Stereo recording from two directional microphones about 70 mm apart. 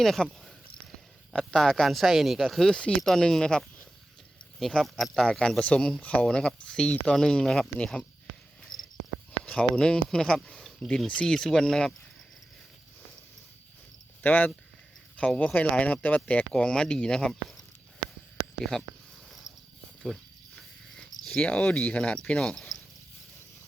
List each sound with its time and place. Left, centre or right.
0.0 s speech: centre
4.8 s speech: centre
5.4 s speech: centre
9.4 s speech: centre
14.2 s speech: left
16.5 s speech: centre
19.3 s purr: centre
20.6 s cricket: centre
21.4 s speech: centre
22.4 s cricket: centre